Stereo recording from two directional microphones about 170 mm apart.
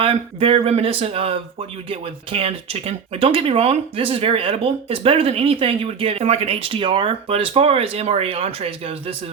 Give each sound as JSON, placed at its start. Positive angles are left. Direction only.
{"t": 0.0, "sound": "speech", "side_deg": -30}